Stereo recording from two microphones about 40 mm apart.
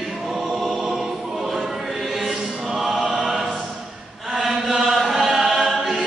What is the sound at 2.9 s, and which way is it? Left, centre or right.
Choir, centre.